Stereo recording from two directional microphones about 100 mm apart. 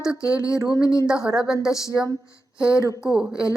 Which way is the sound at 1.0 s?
5° right (ahead or behind).